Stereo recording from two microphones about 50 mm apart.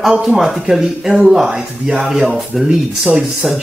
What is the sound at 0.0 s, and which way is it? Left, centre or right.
Speech, centre.